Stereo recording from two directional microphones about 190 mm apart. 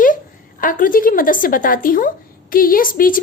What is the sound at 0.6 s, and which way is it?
A woman's voice, 45° left (ahead or behind).